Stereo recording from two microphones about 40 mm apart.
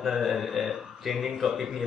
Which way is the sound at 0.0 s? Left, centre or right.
Centre.